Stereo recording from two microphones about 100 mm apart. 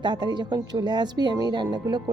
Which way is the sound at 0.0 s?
50° right (ahead or behind).